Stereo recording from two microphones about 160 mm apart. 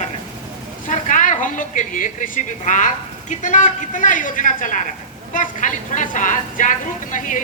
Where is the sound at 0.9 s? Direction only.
50° left (ahead or behind).